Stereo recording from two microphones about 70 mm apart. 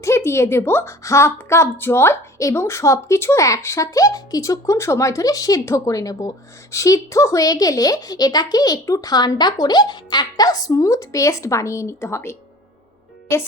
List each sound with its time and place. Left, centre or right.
0.0 s a woman's voice: left